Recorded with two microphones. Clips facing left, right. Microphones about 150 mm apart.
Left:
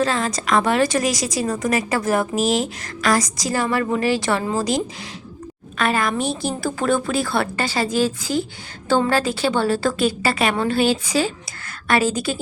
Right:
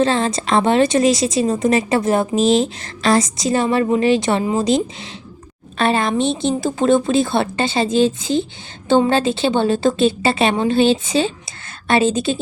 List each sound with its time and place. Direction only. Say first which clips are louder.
0.0 s a woman's voice: right 4 dB; 25° right (ahead or behind)